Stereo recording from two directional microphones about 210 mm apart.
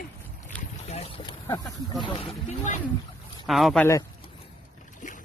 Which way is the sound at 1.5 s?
15° left (ahead or behind).